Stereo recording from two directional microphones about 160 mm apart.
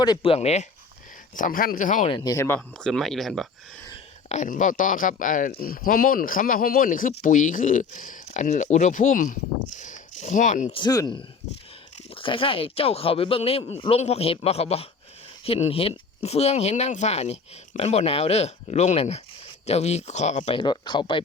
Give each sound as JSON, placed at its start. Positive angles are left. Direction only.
{"t": 0.0, "sound": "speech", "side_deg": 25}
{"t": 0.3, "sound": "speech", "side_deg": 40}
{"t": 1.4, "sound": "speech", "side_deg": 60}
{"t": 2.0, "sound": "speech", "side_deg": 25}
{"t": 4.3, "sound": "speech", "side_deg": 50}
{"t": 10.7, "sound": "speech", "side_deg": 30}